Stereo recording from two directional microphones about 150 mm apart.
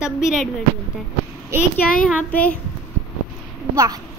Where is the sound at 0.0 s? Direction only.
5° right (ahead or behind).